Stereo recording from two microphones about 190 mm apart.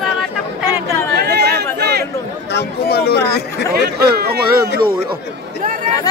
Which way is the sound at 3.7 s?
55° right (ahead or behind).